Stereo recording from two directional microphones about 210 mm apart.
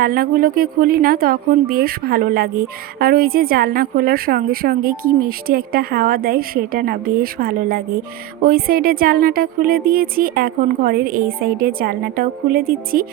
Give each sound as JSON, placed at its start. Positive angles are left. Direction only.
{"t": 0.0, "sound": "a woman's voice", "side_deg": -45}